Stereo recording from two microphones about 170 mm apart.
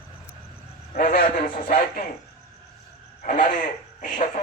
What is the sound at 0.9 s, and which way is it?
A man's voice, 60° left (ahead or behind).